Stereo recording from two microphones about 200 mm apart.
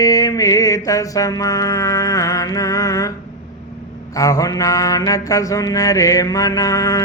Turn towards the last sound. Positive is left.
turn(degrees=15)  # may be behind; listen again after turning